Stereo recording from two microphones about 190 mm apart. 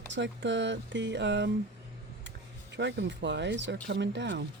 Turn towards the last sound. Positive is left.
turn(degrees=-70)  # may be behind; listen again after turning